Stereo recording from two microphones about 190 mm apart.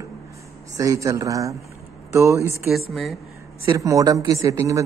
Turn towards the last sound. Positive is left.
turn(degrees=-15)  # may be behind; listen again after turning